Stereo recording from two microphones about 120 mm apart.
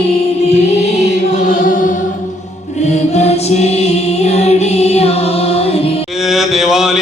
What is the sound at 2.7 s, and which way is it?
Music, 70° left (ahead or behind).